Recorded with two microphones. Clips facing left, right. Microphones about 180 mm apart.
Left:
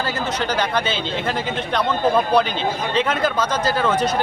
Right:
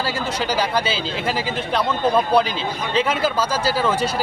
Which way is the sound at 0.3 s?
10° right (ahead or behind).